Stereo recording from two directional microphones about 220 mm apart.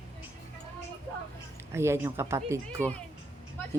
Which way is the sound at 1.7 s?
10° right (ahead or behind).